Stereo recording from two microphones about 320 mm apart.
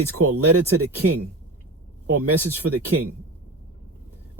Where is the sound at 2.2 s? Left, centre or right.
Right.